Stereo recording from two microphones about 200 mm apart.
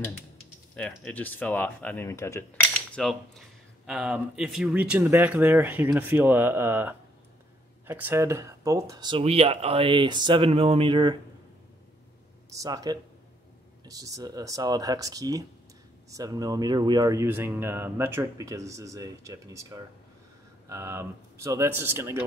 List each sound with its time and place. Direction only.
0.7 s speech: 5° left (ahead or behind)
2.7 s cutlery: centre (ahead or behind)
7.8 s speech: 10° right (ahead or behind)
12.4 s speech: 15° right (ahead or behind)
13.8 s cutlery: 15° right (ahead or behind)